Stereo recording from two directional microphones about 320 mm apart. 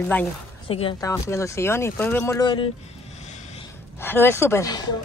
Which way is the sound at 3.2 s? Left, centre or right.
Left.